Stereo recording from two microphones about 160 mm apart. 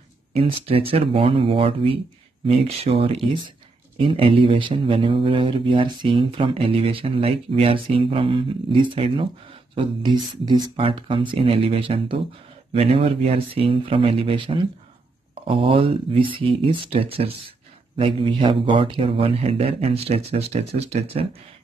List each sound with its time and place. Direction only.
0.3 s speech: 35° right (ahead or behind)